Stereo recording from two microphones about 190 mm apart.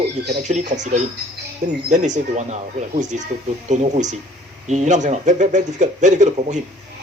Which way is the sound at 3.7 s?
40° right (ahead or behind).